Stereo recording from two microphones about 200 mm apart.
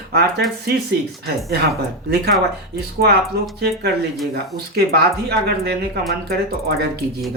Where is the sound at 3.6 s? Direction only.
55° right (ahead or behind).